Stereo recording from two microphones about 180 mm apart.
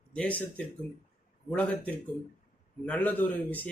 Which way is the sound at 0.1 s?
5° left (ahead or behind).